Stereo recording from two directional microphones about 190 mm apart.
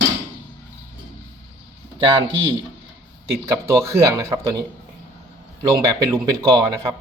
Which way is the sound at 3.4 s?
15° right (ahead or behind).